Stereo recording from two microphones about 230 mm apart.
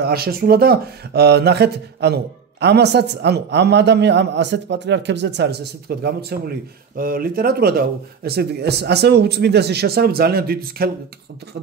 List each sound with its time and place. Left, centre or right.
0.0 s speech: right